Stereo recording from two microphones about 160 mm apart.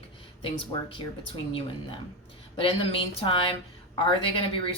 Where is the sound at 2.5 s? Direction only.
35° left (ahead or behind).